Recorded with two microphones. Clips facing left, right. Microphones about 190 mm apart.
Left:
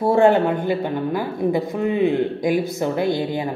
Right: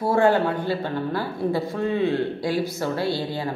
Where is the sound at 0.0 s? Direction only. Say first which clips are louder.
Left 4 dB; 25° left (ahead or behind).